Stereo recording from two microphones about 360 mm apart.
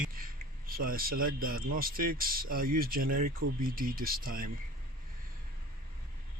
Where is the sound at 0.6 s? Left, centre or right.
Right.